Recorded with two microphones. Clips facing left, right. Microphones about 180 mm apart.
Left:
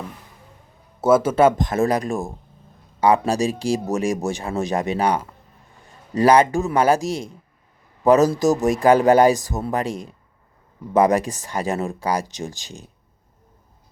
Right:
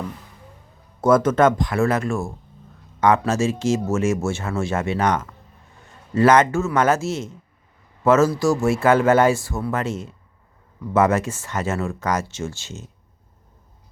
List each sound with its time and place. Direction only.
1.0 s a man's voice: 10° left (ahead or behind)